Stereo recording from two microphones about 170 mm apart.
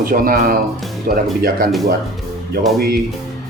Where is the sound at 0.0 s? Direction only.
60° right (ahead or behind).